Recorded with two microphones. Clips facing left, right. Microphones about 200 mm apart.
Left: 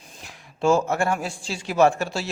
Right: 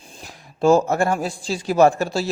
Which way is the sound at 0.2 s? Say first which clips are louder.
Right 4 dB; 35° right (ahead or behind).